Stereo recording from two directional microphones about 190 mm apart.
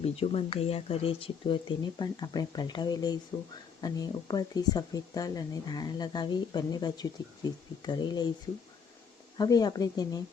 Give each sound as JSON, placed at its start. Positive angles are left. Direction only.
{"t": 0.0, "sound": "speech", "side_deg": 30}
{"t": 9.4, "sound": "speech", "side_deg": 20}